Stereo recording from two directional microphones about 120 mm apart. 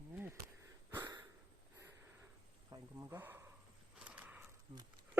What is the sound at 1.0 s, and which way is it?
Sniff, 35° right (ahead or behind).